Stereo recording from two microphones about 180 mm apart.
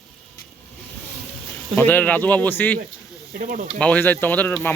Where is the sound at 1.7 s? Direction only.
10° left (ahead or behind).